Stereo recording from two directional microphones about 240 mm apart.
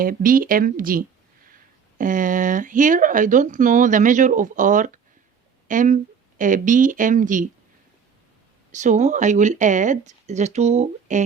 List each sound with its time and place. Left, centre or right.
0.0 s speech: right
8.7 s speech: right